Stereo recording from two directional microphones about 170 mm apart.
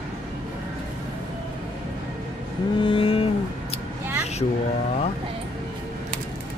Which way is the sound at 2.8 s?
30° left (ahead or behind).